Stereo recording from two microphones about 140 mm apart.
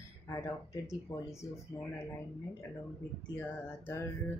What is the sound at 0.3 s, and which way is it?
Speech, 20° left (ahead or behind).